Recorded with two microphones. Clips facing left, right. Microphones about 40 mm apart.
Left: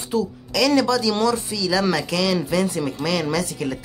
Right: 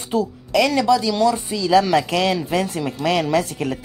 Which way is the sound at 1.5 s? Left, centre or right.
Right.